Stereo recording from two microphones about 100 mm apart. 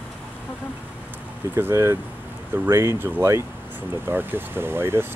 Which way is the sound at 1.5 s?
25° right (ahead or behind).